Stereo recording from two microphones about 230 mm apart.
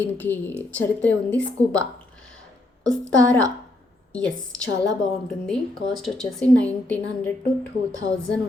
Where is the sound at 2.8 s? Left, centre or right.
Centre.